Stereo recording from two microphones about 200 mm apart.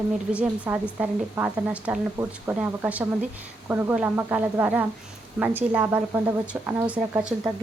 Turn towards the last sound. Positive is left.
turn(degrees=-5)  # may be behind; listen again after turning